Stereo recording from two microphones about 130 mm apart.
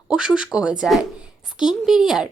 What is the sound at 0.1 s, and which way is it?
A woman's voice, 5° right (ahead or behind).